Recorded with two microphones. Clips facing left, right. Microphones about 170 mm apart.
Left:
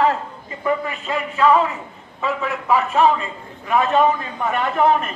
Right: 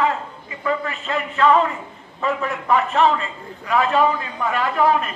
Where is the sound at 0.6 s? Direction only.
15° left (ahead or behind).